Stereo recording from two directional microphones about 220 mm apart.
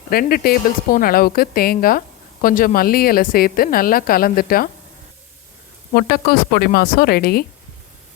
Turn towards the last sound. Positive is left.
turn(degrees=45)  # may be behind; listen again after turning